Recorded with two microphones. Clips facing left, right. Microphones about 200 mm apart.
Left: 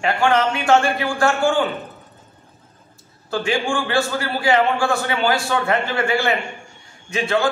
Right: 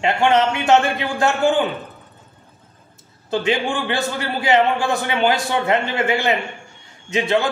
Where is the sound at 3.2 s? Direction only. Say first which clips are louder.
Right 1 dB; 20° right (ahead or behind).